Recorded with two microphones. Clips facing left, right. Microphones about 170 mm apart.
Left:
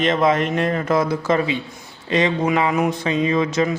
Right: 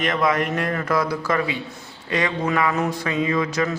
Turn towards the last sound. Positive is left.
turn(degrees=20)  # may be behind; listen again after turning